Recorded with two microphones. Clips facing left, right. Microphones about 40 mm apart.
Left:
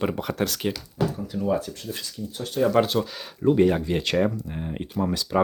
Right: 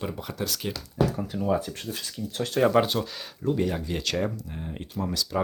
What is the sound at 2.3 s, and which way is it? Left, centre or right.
Speech, right.